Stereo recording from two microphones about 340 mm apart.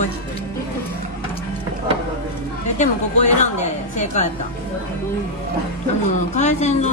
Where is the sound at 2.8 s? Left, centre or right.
Left.